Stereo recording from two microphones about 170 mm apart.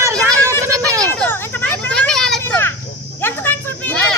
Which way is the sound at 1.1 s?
10° left (ahead or behind).